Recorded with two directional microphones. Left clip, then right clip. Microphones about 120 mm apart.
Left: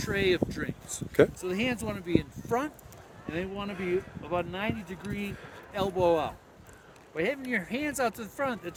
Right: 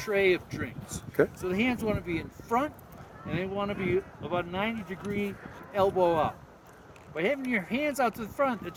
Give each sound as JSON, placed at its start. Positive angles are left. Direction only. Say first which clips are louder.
{"t": 0.0, "sound": "speech", "louder": "right 2 dB", "side_deg": 45}